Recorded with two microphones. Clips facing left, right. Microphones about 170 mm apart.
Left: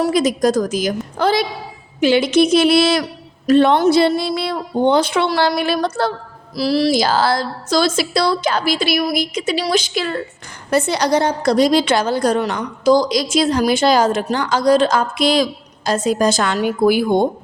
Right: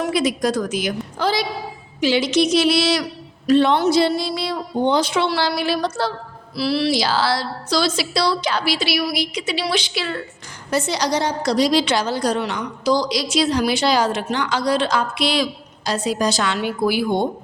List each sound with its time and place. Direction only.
0.0 s a woman's voice: 45° left (ahead or behind)
1.2 s a woman's voice: 55° left (ahead or behind)
6.6 s a woman's voice: 40° left (ahead or behind)
10.7 s a woman's voice: 55° left (ahead or behind)